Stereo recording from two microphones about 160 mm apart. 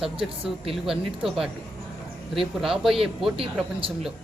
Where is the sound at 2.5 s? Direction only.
Centre (ahead or behind).